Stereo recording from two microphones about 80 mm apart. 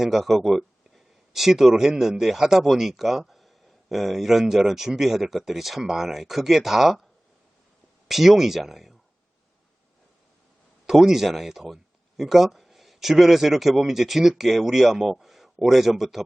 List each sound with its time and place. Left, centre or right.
0.0 s speech: centre
8.0 s speech: centre
10.8 s speech: centre